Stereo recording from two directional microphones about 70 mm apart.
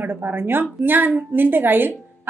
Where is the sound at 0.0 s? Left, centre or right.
Right.